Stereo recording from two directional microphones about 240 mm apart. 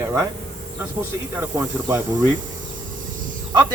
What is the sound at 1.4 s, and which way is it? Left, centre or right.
Speech, centre.